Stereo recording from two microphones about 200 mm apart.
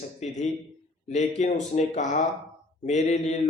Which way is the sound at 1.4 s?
35° left (ahead or behind).